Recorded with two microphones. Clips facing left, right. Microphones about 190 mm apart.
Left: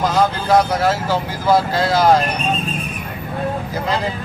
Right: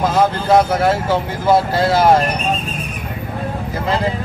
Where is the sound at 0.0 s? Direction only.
25° right (ahead or behind).